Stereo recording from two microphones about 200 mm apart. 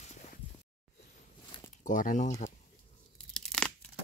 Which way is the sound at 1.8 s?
40° left (ahead or behind).